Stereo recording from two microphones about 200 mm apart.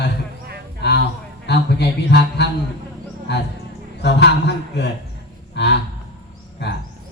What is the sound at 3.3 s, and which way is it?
A man's voice, 60° left (ahead or behind).